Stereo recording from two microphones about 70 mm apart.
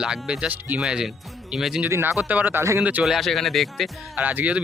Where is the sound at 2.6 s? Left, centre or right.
Right.